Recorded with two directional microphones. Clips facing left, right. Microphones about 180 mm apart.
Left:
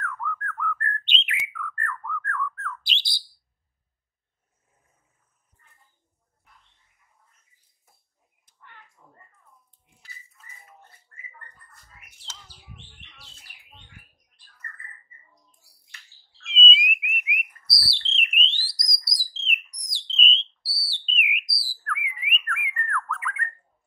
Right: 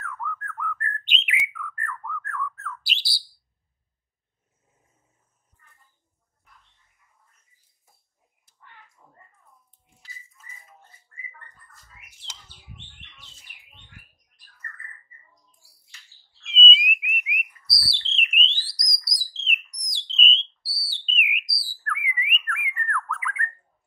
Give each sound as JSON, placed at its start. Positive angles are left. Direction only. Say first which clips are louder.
{"t": 0.0, "sound": "bird", "louder": "left 2 dB", "side_deg": -5}
{"t": 12.8, "sound": "bird", "louder": "even", "side_deg": 0}
{"t": 14.3, "sound": "bird", "louder": "right 1 dB", "side_deg": 30}
{"t": 16.4, "sound": "a sound", "louder": "right 1 dB", "side_deg": 0}
{"t": 19.0, "sound": "bird", "louder": "right 1 dB", "side_deg": 0}